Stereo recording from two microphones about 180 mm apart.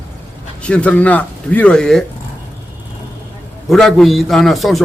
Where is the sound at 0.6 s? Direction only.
5° left (ahead or behind).